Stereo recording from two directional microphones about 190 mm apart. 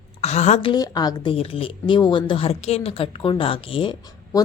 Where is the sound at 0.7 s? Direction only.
20° left (ahead or behind).